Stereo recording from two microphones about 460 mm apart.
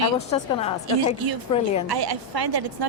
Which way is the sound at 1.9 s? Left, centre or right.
Right.